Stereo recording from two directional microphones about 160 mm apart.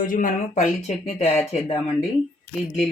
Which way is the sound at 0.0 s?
55° left (ahead or behind).